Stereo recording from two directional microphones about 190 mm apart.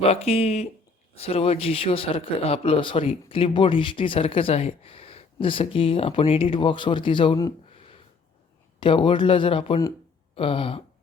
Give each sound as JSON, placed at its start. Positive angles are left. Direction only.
{"t": 0.0, "sound": "speech", "side_deg": 35}
{"t": 8.8, "sound": "speech", "side_deg": 25}